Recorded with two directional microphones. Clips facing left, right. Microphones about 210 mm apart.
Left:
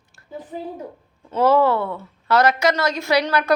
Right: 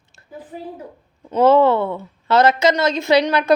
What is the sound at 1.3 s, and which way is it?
A woman's voice, 25° right (ahead or behind).